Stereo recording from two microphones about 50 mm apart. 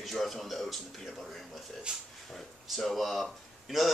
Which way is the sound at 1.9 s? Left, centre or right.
Centre.